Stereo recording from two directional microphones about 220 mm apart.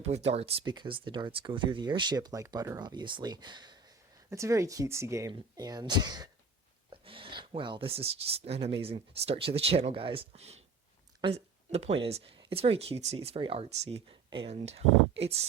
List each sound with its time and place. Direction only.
0.0 s speech: 30° right (ahead or behind)